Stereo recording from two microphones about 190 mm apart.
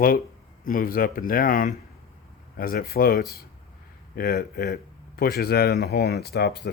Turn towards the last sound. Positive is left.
turn(degrees=60)  # may be behind; listen again after turning